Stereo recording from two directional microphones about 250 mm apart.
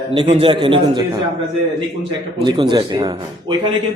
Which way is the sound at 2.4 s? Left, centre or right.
Centre.